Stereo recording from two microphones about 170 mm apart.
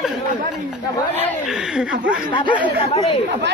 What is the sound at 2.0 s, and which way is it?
Speech, 5° right (ahead or behind).